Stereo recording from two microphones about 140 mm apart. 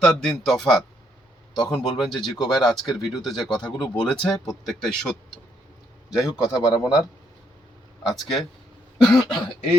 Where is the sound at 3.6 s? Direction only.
30° left (ahead or behind).